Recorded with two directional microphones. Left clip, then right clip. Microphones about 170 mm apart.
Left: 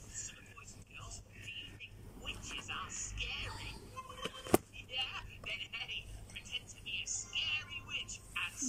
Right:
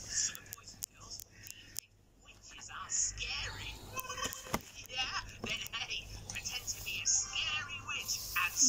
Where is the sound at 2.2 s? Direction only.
15° left (ahead or behind).